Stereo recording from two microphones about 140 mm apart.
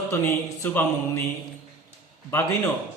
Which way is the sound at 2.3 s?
15° left (ahead or behind).